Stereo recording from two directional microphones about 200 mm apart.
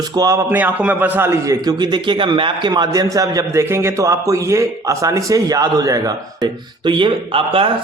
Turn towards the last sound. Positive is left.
turn(degrees=-25)  # may be behind; listen again after turning